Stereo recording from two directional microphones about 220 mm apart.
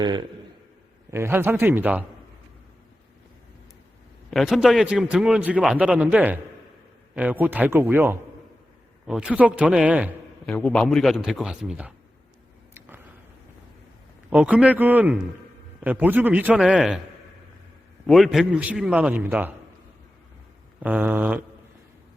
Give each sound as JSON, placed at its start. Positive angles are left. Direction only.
{"t": 0.0, "sound": "a man's voice", "side_deg": -20}
{"t": 4.3, "sound": "a man's voice", "side_deg": 0}
{"t": 10.5, "sound": "a man's voice", "side_deg": 5}
{"t": 14.3, "sound": "a man's voice", "side_deg": -5}
{"t": 18.0, "sound": "a man's voice", "side_deg": 0}
{"t": 20.8, "sound": "a man's voice", "side_deg": -5}